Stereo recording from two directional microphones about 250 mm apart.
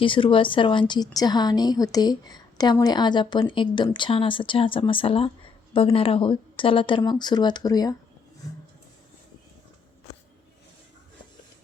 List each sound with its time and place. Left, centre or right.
0.0 s a woman's voice: left